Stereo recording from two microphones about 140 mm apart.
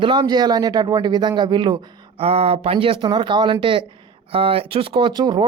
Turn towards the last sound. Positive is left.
turn(degrees=-30)  # may be behind; listen again after turning